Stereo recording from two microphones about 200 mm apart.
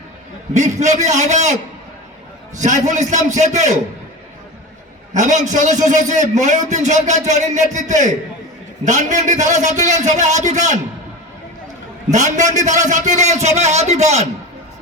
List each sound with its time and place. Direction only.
0.5 s a man's voice: 35° right (ahead or behind)
2.6 s a man's voice: 35° right (ahead or behind)
5.1 s a man's voice: 35° right (ahead or behind)
12.1 s a man's voice: 35° right (ahead or behind)